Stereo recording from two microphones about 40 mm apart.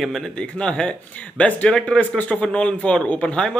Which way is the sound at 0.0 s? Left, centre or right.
Centre.